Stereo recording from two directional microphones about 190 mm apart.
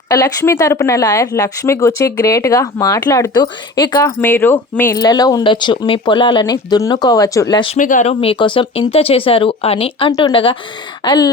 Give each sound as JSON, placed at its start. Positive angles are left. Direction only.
{"t": 0.1, "sound": "speech", "side_deg": 15}
{"t": 7.8, "sound": "speech", "side_deg": 40}